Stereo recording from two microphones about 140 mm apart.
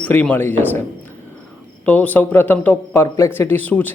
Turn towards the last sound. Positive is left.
turn(degrees=10)  # may be behind; listen again after turning